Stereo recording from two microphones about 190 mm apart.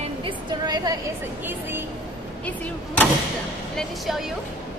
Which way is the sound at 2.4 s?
10° left (ahead or behind).